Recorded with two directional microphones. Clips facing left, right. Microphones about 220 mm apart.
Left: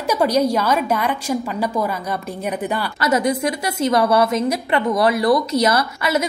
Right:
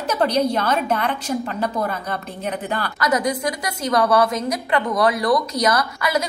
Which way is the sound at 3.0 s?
25° left (ahead or behind).